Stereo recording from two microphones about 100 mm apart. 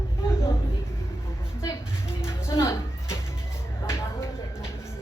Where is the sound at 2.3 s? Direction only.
30° left (ahead or behind).